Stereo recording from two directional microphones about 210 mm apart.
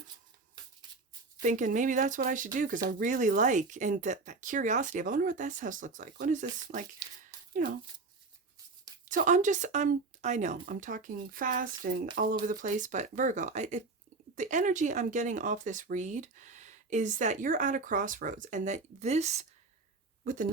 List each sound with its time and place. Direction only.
1.4 s speech: 35° right (ahead or behind)
9.0 s speech: 40° right (ahead or behind)